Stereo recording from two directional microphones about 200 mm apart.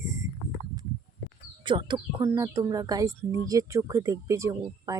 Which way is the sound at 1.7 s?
25° right (ahead or behind).